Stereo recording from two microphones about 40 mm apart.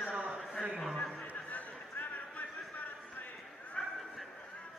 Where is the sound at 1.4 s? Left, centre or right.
Left.